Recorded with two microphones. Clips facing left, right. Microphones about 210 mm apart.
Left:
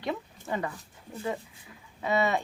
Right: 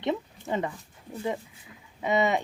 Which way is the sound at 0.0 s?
20° right (ahead or behind).